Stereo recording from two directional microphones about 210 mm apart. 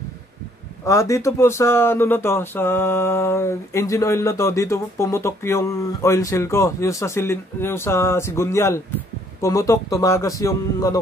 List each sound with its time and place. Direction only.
0.8 s speech: 15° left (ahead or behind)